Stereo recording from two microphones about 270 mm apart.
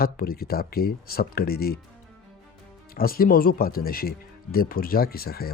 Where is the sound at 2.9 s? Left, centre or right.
Left.